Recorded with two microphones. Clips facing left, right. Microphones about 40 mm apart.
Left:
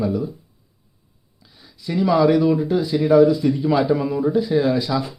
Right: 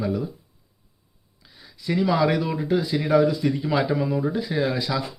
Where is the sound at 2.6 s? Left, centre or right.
Right.